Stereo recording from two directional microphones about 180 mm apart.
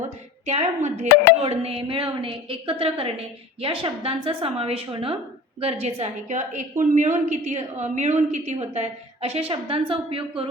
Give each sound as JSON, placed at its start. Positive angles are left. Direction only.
{"t": 0.4, "sound": "a woman's voice", "side_deg": -40}